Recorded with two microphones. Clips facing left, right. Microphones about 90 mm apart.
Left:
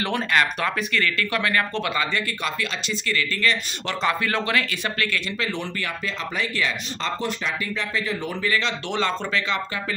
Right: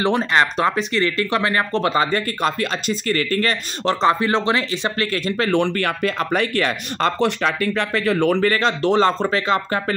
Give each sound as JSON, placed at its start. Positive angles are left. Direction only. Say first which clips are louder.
{"t": 0.0, "sound": "speech", "louder": "right 5 dB", "side_deg": -30}
{"t": 5.5, "sound": "speech", "louder": "right 10 dB", "side_deg": -60}